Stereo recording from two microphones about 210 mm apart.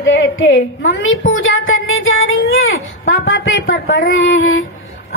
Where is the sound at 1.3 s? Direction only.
70° left (ahead or behind).